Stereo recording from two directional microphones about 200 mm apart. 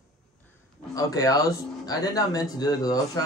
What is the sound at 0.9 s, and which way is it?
Speech, 15° left (ahead or behind).